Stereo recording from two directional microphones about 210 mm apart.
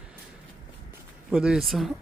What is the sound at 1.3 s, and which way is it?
Speech, 5° right (ahead or behind).